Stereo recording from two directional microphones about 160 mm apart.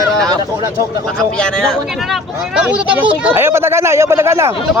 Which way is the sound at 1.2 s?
5° left (ahead or behind).